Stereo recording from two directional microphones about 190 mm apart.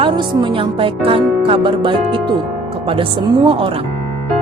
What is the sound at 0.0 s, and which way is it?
Speech, 25° right (ahead or behind).